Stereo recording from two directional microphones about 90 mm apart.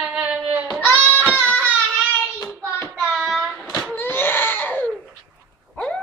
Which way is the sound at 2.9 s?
10° right (ahead or behind).